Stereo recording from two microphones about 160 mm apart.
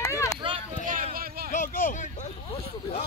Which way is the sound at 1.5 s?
55° left (ahead or behind).